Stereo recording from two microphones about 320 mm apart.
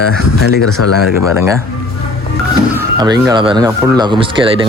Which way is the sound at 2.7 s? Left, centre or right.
Centre.